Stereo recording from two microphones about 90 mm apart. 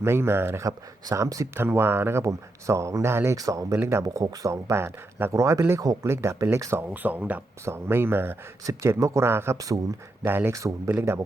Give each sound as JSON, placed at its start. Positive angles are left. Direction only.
{"t": 0.0, "sound": "speech", "side_deg": -25}
{"t": 1.0, "sound": "speech", "side_deg": -40}
{"t": 3.3, "sound": "speech", "side_deg": -40}
{"t": 6.8, "sound": "speech", "side_deg": -20}
{"t": 7.6, "sound": "speech", "side_deg": -30}
{"t": 9.6, "sound": "speech", "side_deg": -40}
{"t": 10.2, "sound": "speech", "side_deg": -25}
{"t": 10.5, "sound": "speech", "side_deg": -35}